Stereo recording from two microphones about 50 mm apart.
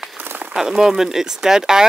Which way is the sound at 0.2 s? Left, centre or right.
Right.